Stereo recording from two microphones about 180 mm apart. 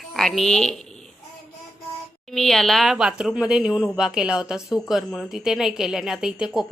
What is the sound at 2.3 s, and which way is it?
Speech, centre (ahead or behind).